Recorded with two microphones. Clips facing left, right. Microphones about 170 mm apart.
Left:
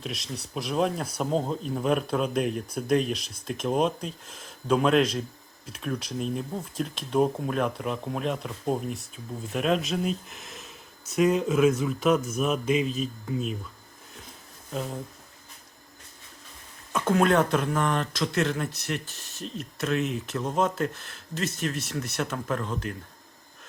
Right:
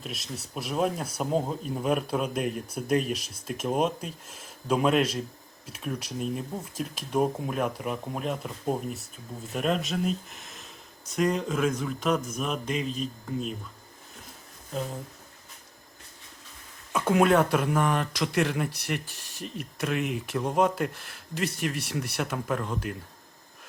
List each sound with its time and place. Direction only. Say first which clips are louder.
0.0 s speech: left 2 dB; centre (ahead or behind)
16.9 s speech: even; 10° right (ahead or behind)